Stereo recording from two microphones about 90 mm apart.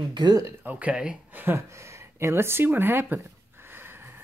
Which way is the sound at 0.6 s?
15° right (ahead or behind).